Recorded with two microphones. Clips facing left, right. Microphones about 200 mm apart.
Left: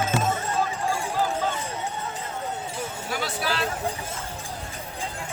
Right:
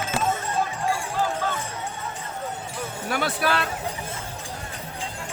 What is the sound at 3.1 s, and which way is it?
Music, 60° right (ahead or behind).